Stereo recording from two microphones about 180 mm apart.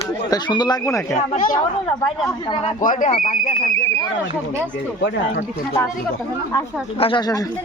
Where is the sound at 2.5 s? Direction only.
30° left (ahead or behind).